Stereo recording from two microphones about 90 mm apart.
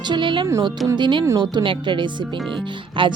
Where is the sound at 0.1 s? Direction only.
60° right (ahead or behind).